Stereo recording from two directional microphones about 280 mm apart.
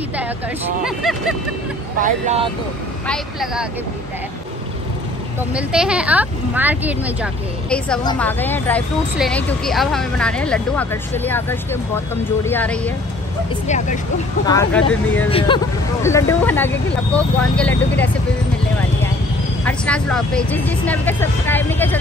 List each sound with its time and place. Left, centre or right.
0.8 s speech: centre
2.0 s speech: right
3.1 s speech: centre
5.5 s speech: centre
8.0 s speech: centre
13.7 s speech: left
14.4 s speech: centre
19.6 s speech: centre